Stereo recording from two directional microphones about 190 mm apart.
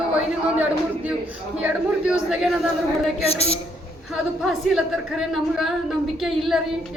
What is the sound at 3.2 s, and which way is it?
Speech, 30° left (ahead or behind).